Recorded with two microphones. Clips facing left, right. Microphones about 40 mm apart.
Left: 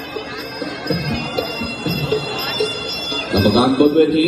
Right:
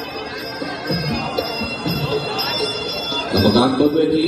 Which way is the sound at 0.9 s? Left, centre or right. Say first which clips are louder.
Left 1 dB; left.